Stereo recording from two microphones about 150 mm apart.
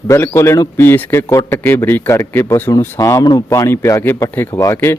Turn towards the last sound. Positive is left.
turn(degrees=15)  # may be behind; listen again after turning